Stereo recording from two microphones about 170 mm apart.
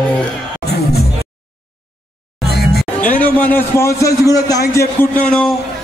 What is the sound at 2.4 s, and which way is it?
Music, 70° left (ahead or behind).